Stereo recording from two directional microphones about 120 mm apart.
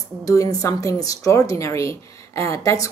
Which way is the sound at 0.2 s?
30° left (ahead or behind).